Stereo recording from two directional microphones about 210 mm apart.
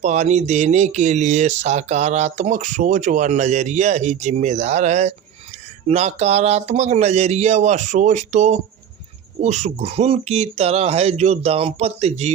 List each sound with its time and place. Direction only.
0.0 s speech: 35° right (ahead or behind)